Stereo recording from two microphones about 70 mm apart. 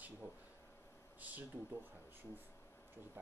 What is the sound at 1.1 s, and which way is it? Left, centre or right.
Speech, right.